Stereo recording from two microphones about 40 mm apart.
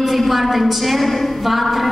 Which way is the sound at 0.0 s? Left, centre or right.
Centre.